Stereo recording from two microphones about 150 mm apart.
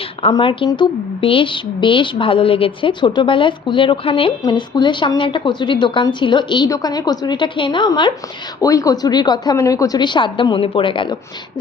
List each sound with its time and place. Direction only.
0.2 s a woman's voice: 35° left (ahead or behind)